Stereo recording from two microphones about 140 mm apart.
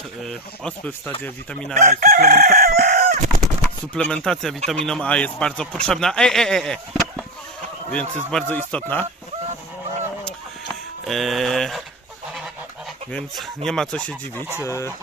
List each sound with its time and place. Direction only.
0.2 s speech: 5° left (ahead or behind)
1.7 s chicken: 60° right (ahead or behind)
3.9 s speech: 5° left (ahead or behind)
11.0 s speech: centre (ahead or behind)
13.1 s speech: 5° left (ahead or behind)
14.6 s speech: 20° left (ahead or behind)